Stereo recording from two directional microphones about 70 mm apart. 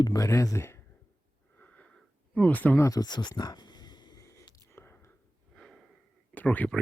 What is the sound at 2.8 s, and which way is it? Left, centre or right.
Speech, left.